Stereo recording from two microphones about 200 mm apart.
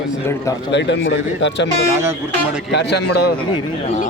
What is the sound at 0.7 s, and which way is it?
Speech, 60° left (ahead or behind).